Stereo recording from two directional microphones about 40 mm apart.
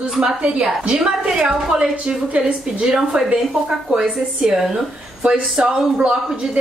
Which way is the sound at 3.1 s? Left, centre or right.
Right.